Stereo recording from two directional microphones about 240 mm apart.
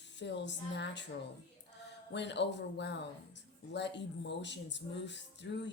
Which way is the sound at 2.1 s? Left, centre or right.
Left.